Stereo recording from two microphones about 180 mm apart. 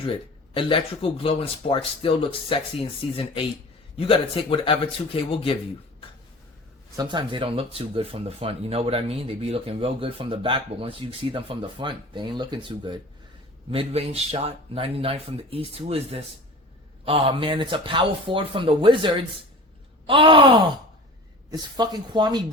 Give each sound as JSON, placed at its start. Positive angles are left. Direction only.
{"t": 0.0, "sound": "speech", "side_deg": 30}
{"t": 6.9, "sound": "speech", "side_deg": -25}